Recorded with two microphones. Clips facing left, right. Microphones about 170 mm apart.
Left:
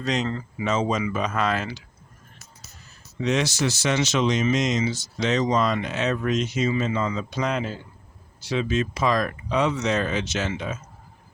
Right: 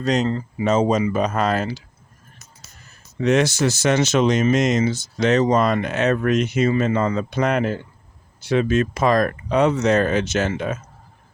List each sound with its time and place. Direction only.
0.0 s speech: 40° right (ahead or behind)
3.2 s speech: 55° right (ahead or behind)